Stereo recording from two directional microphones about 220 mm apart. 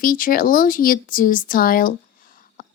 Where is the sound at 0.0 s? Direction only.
40° left (ahead or behind).